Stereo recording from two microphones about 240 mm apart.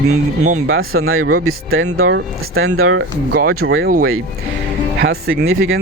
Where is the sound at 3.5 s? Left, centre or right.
Right.